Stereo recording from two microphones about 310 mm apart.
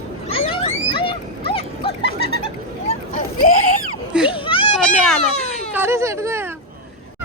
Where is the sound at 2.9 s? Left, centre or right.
Left.